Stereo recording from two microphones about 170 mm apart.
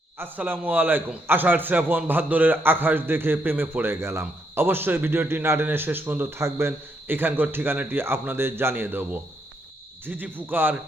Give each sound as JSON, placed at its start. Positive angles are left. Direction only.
{"t": 0.2, "sound": "a man's voice", "side_deg": -10}